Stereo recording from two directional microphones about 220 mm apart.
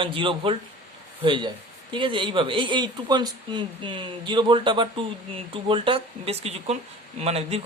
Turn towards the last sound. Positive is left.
turn(degrees=-30)  # may be behind; listen again after turning